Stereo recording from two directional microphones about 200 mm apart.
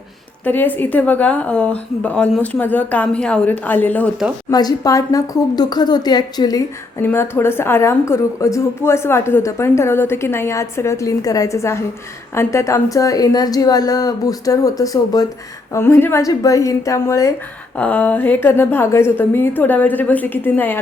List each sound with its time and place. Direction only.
0.4 s a woman's voice: 10° left (ahead or behind)
4.5 s a woman's voice: 20° left (ahead or behind)